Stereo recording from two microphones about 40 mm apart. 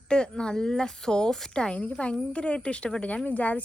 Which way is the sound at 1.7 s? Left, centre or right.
Left.